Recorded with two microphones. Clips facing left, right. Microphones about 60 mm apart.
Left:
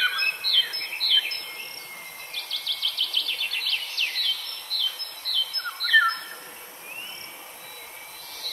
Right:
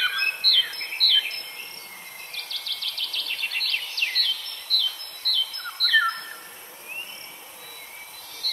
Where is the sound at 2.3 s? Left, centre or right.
Right.